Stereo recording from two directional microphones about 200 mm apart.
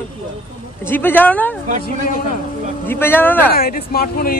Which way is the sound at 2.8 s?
10° left (ahead or behind).